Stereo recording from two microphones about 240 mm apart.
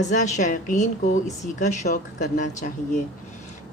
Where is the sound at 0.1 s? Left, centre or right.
Left.